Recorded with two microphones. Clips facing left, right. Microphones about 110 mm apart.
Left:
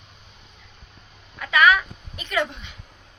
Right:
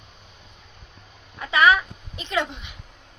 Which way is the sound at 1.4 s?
25° right (ahead or behind).